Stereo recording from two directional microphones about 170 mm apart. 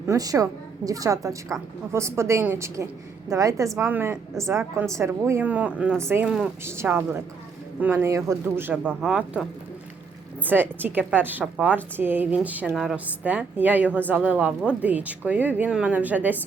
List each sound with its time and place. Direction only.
0.1 s a woman's voice: 20° right (ahead or behind)